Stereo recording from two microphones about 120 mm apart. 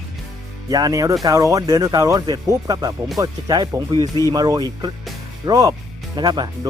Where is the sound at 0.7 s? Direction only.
30° right (ahead or behind).